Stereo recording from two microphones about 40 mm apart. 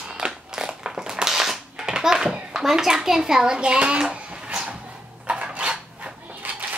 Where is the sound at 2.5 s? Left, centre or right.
Centre; by 4.7 s right.